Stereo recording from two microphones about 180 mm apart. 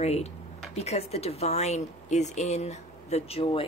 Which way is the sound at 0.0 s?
35° left (ahead or behind).